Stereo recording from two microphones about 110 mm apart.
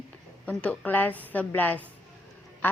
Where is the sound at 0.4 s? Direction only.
10° left (ahead or behind).